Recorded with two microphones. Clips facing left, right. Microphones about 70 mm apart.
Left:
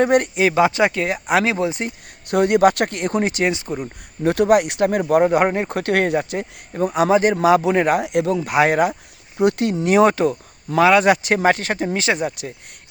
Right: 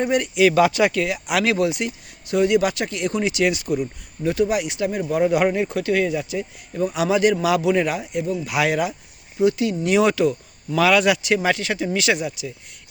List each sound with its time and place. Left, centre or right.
0.0 s speech: left
0.5 s speech: left
2.2 s speech: left
3.5 s speech: left
4.2 s speech: left
7.9 s speech: left
8.4 s speech: left
9.4 s speech: left
9.8 s speech: left
10.8 s speech: left